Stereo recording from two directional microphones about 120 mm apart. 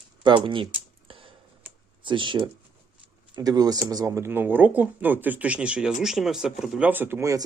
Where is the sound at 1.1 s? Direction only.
50° right (ahead or behind).